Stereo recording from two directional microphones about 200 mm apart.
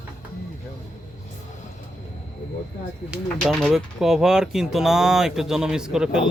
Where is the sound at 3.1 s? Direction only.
5° right (ahead or behind).